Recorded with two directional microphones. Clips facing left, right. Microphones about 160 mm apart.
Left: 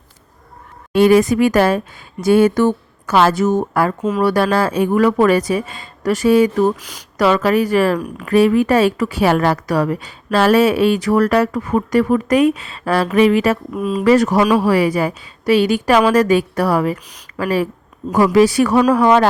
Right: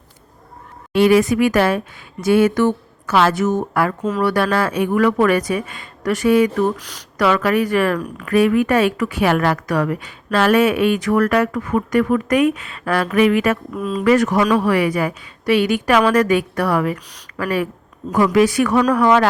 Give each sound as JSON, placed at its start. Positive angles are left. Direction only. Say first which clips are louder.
{"t": 0.9, "sound": "speech", "louder": "left 2 dB", "side_deg": 40}
{"t": 6.7, "sound": "speech", "louder": "even", "side_deg": 10}
{"t": 7.2, "sound": "speech", "louder": "left 2 dB", "side_deg": 30}
{"t": 13.7, "sound": "speech", "louder": "left 3 dB", "side_deg": 10}
{"t": 14.0, "sound": "speech", "louder": "left 2 dB", "side_deg": 30}